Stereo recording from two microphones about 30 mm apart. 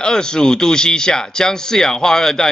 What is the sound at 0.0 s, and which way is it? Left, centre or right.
Speech, left.